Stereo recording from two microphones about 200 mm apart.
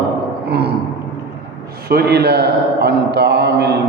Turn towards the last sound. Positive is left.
turn(degrees=-55)  # may be behind; listen again after turning